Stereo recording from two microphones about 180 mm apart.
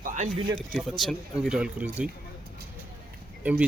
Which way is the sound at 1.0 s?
Centre (ahead or behind).